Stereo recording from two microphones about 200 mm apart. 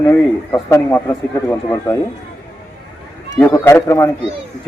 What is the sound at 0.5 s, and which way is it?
Speech, 15° left (ahead or behind).